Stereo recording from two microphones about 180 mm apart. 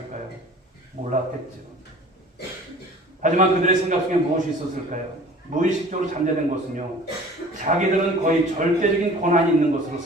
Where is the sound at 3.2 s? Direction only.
45° right (ahead or behind).